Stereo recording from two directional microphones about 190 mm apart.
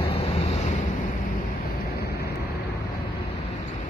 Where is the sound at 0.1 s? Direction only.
30° left (ahead or behind).